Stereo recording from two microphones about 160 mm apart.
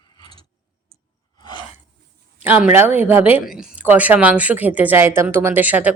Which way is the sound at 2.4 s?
10° right (ahead or behind).